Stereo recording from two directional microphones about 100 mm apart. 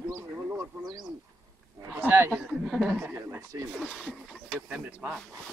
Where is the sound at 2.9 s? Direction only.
20° right (ahead or behind).